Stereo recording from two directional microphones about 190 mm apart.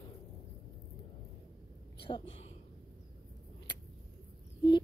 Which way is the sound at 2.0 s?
30° left (ahead or behind).